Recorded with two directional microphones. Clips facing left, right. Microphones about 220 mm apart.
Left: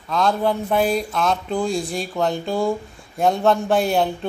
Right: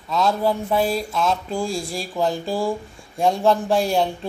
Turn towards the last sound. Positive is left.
turn(degrees=0)  # may be behind; listen again after turning